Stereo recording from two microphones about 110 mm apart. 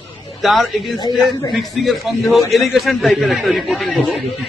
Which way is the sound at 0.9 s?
40° left (ahead or behind).